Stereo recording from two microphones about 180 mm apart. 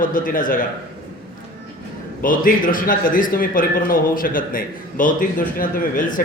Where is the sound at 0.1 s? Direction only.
50° left (ahead or behind).